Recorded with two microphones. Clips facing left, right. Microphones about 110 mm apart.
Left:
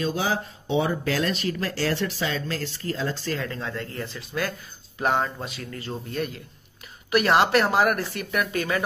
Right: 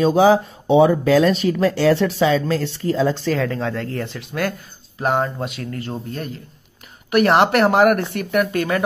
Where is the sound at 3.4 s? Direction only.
90° right.